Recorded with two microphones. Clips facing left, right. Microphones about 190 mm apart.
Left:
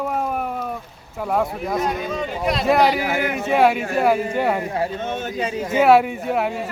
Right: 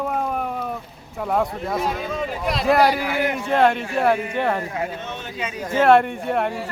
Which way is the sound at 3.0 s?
45° left (ahead or behind).